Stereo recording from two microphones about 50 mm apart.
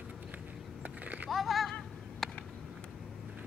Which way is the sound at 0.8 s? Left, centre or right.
Right.